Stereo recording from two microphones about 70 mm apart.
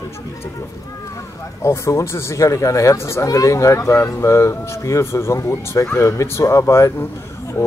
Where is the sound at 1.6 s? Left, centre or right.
Left.